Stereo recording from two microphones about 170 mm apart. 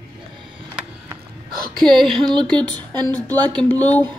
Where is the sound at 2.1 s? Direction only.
25° right (ahead or behind).